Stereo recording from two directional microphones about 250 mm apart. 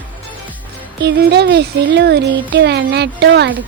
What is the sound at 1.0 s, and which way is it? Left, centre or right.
Speech, right.